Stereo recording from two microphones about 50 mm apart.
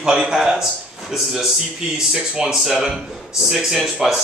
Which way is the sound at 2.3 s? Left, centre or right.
Centre.